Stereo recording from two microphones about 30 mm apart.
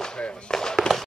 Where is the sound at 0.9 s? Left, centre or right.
Left.